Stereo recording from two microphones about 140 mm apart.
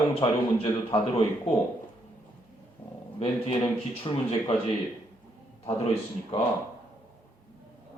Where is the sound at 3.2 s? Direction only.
45° left (ahead or behind).